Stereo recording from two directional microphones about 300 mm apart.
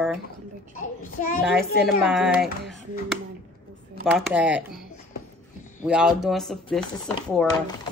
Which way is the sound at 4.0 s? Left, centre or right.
Centre.